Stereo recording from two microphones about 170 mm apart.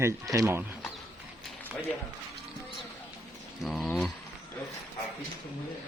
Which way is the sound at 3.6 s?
Centre (ahead or behind).